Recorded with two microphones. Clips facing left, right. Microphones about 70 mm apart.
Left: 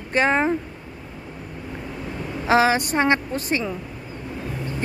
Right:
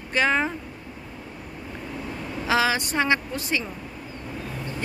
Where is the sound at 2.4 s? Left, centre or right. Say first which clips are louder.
Left 5 dB; left.